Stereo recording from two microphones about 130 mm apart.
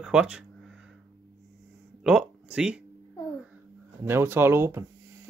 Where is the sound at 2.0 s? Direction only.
5° right (ahead or behind).